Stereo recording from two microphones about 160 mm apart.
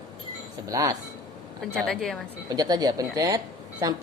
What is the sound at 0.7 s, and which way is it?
Speech, 20° right (ahead or behind).